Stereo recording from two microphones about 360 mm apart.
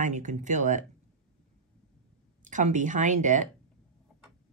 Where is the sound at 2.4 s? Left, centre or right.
Right.